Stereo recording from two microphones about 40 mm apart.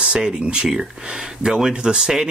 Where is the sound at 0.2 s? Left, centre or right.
Right.